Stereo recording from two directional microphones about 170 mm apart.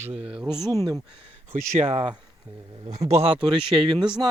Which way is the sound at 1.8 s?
35° right (ahead or behind).